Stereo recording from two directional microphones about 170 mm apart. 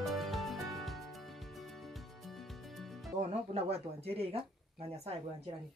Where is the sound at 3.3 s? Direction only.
40° right (ahead or behind).